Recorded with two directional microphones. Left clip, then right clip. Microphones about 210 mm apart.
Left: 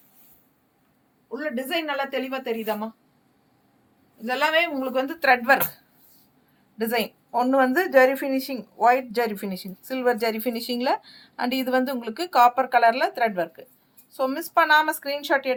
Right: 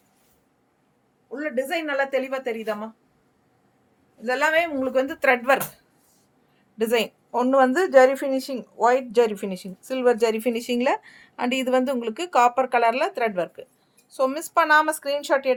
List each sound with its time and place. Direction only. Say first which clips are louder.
1.3 s a woman's voice: right 2 dB; 20° right (ahead or behind)
4.3 s a woman's voice: right 1 dB; 25° right (ahead or behind)
6.7 s a woman's voice: right 3 dB; 35° right (ahead or behind)